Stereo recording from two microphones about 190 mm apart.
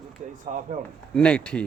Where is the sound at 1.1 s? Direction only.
5° left (ahead or behind).